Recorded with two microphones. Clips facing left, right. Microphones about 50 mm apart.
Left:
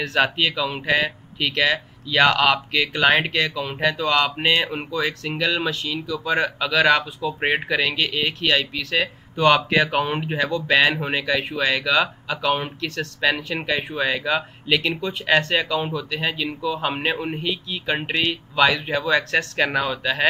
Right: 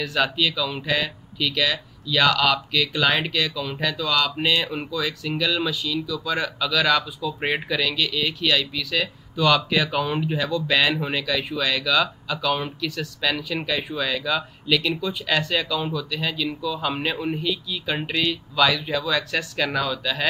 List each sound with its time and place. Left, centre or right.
0.2 s speech: left
12.8 s speech: left
13.7 s speech: left